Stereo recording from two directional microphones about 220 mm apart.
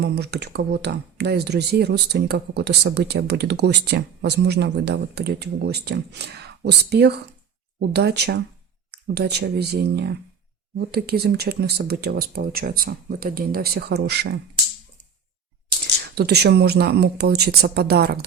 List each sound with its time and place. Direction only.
0.0 s speech: 50° right (ahead or behind)
16.1 s speech: 50° right (ahead or behind)